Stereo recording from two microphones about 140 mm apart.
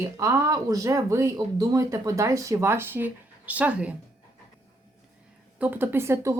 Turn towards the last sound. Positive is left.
turn(degrees=-20)  # may be behind; listen again after turning